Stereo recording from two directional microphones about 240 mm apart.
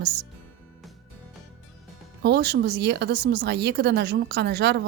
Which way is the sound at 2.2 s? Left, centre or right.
Right.